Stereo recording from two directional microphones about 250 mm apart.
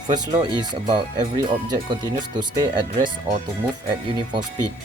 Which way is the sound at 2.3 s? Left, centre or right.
Centre.